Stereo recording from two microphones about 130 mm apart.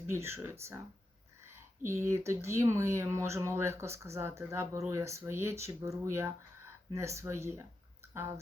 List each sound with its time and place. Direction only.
0.1 s speech: 20° right (ahead or behind)
1.8 s speech: 20° right (ahead or behind)